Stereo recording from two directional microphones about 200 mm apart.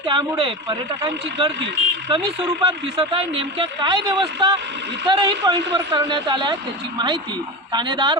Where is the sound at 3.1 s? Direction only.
30° right (ahead or behind).